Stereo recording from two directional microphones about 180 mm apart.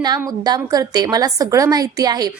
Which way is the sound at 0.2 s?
20° right (ahead or behind).